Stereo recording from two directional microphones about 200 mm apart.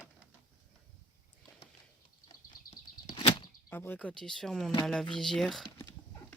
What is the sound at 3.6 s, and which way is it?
Speech, 10° left (ahead or behind).